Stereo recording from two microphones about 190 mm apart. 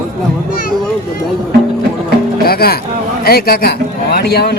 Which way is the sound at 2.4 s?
55° left (ahead or behind).